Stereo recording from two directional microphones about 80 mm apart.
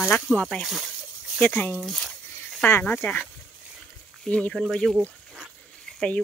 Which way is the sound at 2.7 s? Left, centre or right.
Left.